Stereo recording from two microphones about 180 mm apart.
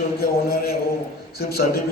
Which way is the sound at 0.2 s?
60° left (ahead or behind).